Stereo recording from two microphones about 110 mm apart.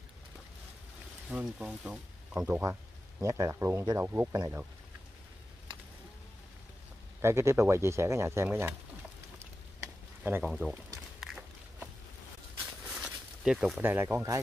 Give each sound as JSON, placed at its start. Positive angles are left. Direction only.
{"t": 1.3, "sound": "speech", "side_deg": -5}
{"t": 2.4, "sound": "speech", "side_deg": -20}
{"t": 7.2, "sound": "speech", "side_deg": -25}
{"t": 9.8, "sound": "frying", "side_deg": -20}
{"t": 10.4, "sound": "speech", "side_deg": -5}
{"t": 12.8, "sound": "a sound", "side_deg": -5}
{"t": 13.8, "sound": "speech", "side_deg": -20}